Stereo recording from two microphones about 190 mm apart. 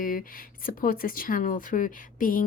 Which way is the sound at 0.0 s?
45° left (ahead or behind).